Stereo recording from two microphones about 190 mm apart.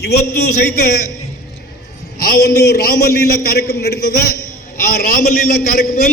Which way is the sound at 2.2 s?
55° left (ahead or behind).